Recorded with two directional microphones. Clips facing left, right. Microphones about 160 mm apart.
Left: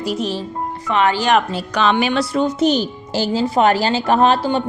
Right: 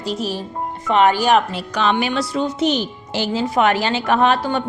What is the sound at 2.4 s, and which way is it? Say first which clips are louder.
A woman's voice: left 3 dB; 40° left (ahead or behind).